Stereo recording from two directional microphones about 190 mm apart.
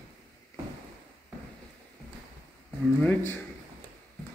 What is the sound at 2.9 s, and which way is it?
Speech, 5° left (ahead or behind).